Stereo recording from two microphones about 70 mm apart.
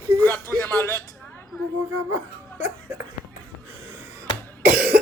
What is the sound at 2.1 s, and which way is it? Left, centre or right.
Laughter, right.